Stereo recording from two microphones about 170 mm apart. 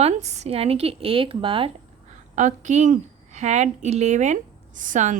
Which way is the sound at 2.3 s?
45° right (ahead or behind).